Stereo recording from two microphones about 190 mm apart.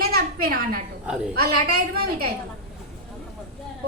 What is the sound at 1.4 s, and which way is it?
Speech, 55° right (ahead or behind).